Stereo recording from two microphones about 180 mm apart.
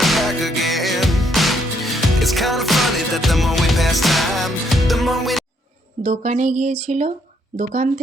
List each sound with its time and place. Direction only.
0.0 s music: centre (ahead or behind)
6.0 s speech: 35° right (ahead or behind)